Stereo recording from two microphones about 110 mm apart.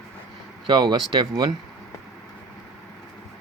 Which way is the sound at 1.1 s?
40° right (ahead or behind).